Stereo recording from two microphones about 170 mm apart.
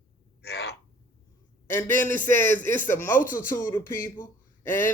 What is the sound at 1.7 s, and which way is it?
Speech, 15° left (ahead or behind).